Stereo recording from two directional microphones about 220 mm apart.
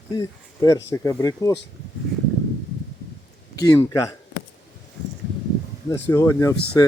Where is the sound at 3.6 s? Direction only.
15° left (ahead or behind).